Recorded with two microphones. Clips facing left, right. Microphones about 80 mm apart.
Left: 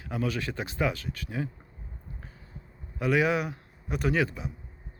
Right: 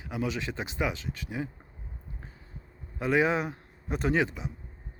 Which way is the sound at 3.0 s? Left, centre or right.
Right.